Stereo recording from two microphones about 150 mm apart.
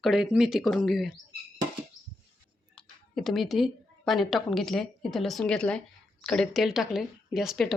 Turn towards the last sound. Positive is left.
turn(degrees=0)  # may be behind; listen again after turning